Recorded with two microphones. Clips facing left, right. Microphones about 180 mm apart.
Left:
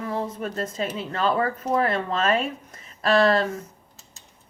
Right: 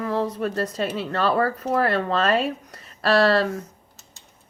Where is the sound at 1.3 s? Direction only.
35° right (ahead or behind).